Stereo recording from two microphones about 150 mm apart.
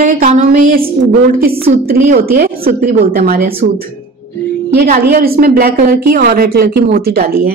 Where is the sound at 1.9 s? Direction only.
85° right.